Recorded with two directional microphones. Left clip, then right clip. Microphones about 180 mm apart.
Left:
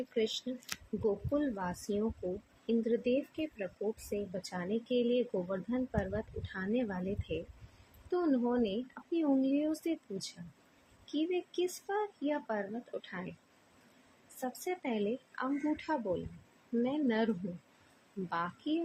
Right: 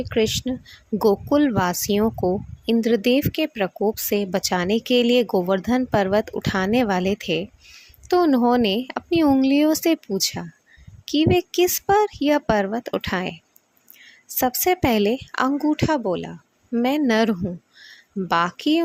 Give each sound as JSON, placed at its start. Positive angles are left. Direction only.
{"t": 0.1, "sound": "speech", "side_deg": -65}
{"t": 14.4, "sound": "speech", "side_deg": -65}
{"t": 18.3, "sound": "speech", "side_deg": -65}